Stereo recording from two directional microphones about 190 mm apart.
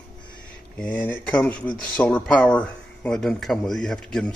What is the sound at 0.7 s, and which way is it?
Speech, 10° left (ahead or behind).